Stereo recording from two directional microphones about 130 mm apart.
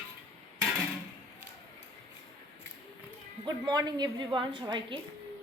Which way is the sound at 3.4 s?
35° right (ahead or behind).